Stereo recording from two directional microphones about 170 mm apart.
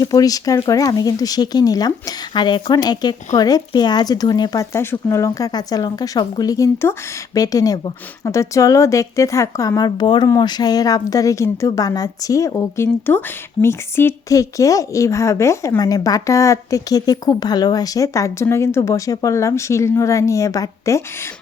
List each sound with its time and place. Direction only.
0.0 s a woman's voice: 20° left (ahead or behind)